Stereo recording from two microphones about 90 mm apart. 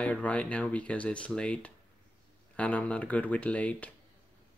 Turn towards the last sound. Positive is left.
turn(degrees=15)  # may be behind; listen again after turning